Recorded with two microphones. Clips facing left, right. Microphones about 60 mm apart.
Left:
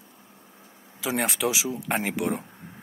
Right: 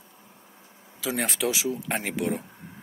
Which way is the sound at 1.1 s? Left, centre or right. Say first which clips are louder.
Left 2 dB; centre.